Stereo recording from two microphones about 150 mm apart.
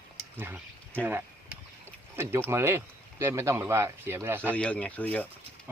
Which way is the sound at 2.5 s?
15° right (ahead or behind).